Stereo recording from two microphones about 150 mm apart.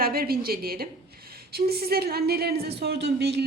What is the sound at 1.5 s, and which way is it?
A woman's voice, 90° right.